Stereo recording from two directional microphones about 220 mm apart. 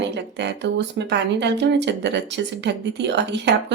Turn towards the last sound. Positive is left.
turn(degrees=-50)  # may be behind; listen again after turning